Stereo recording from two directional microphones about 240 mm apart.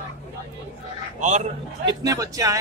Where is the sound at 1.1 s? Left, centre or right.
Right.